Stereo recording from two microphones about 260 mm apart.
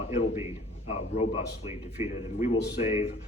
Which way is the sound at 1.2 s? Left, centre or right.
Left.